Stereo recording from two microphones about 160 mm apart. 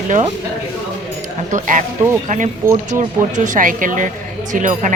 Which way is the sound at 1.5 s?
50° right (ahead or behind).